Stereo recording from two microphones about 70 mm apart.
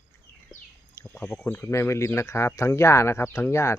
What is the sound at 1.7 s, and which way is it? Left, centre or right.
Speech, left.